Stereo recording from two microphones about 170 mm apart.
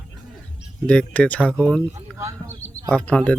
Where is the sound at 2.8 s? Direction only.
5° left (ahead or behind).